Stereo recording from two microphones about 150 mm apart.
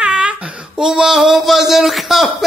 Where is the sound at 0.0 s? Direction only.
5° right (ahead or behind).